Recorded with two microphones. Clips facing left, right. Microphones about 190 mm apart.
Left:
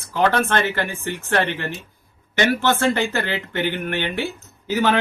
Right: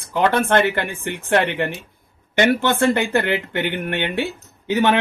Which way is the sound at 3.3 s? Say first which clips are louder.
Right 2 dB; 20° right (ahead or behind).